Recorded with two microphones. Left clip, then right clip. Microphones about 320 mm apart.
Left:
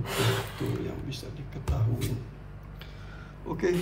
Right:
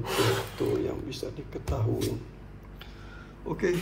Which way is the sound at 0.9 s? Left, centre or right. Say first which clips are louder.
Right 5 dB; centre.